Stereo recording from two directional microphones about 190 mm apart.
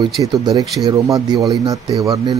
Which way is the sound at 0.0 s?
20° right (ahead or behind).